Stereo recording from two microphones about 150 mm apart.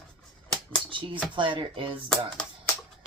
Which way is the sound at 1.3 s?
35° right (ahead or behind).